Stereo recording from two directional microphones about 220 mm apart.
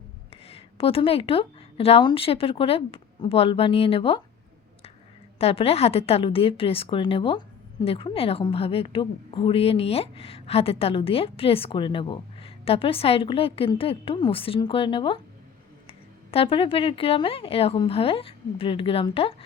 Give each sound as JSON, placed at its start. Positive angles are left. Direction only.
{"t": 0.4, "sound": "a woman's voice", "side_deg": 25}
{"t": 5.4, "sound": "a woman's voice", "side_deg": 25}